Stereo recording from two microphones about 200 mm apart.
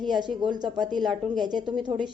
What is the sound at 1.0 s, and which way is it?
Speech, centre (ahead or behind).